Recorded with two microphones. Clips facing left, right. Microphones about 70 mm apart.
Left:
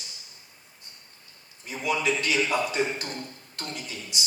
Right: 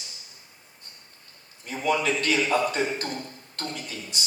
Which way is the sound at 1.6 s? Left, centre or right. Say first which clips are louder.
Right 2 dB; right.